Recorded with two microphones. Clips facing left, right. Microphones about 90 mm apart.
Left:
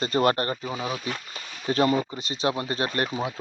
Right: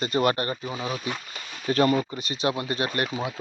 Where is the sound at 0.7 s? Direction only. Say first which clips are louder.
Even; 15° left (ahead or behind).